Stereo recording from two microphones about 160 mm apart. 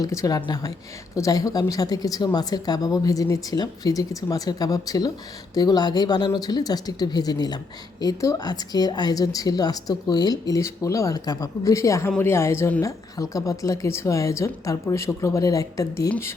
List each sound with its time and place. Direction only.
0.0 s speech: 20° left (ahead or behind)